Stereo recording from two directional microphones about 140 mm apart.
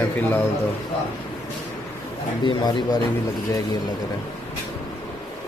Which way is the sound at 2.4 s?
30° left (ahead or behind).